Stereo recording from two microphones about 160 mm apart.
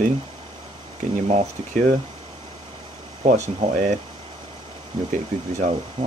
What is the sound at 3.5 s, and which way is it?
Speech, 45° right (ahead or behind).